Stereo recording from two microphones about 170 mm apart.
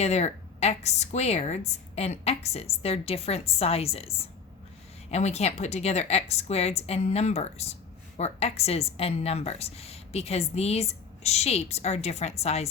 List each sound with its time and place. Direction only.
0.0 s a woman's voice: 40° left (ahead or behind)